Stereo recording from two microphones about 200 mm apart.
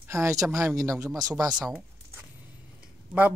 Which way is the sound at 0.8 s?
15° right (ahead or behind).